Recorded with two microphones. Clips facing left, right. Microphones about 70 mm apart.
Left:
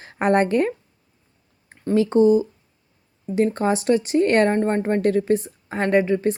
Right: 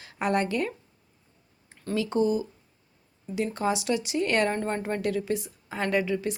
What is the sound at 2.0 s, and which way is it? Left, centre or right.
Speech, left.